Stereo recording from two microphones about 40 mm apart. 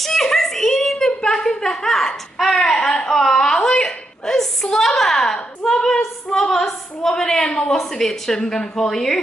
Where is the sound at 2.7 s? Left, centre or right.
Centre.